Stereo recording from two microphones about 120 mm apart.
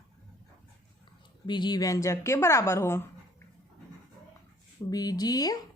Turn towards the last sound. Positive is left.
turn(degrees=30)  # may be behind; listen again after turning